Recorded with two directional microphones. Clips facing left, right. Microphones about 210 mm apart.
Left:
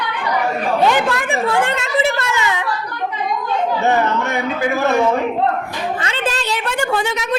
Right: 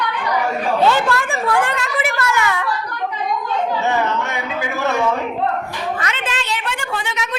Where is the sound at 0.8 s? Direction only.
15° left (ahead or behind).